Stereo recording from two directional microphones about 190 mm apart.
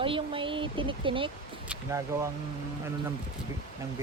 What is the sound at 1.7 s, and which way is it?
Speech, 15° right (ahead or behind).